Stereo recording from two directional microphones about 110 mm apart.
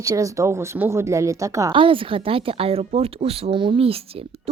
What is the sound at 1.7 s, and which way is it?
A woman's voice, 50° right (ahead or behind).